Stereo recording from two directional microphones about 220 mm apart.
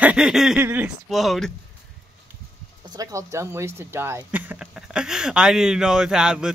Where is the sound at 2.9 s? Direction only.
15° right (ahead or behind).